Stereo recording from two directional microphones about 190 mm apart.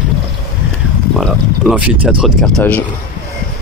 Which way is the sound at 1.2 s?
5° right (ahead or behind).